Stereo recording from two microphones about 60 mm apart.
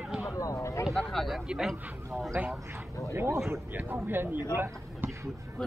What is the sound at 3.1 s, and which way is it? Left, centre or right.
Speech, right.